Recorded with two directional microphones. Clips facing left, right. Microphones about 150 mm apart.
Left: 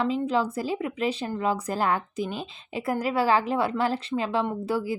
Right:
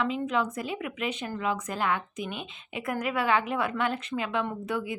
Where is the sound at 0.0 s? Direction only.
30° left (ahead or behind).